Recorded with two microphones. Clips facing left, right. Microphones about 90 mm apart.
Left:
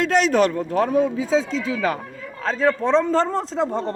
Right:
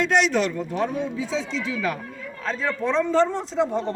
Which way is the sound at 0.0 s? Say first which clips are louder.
Left 3 dB; 40° left (ahead or behind).